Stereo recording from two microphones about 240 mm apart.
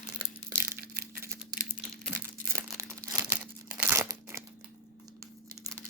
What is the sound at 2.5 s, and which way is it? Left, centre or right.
Crumpling, centre.